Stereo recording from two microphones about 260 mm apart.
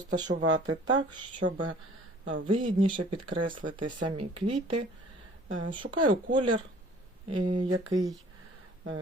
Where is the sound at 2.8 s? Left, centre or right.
Centre.